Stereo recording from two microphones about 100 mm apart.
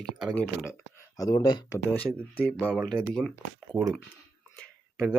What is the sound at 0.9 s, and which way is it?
Speech, 35° left (ahead or behind).